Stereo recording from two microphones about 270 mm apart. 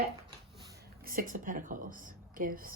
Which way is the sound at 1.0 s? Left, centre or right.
Right.